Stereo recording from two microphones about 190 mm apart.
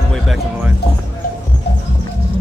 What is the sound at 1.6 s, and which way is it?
Music, 60° left (ahead or behind).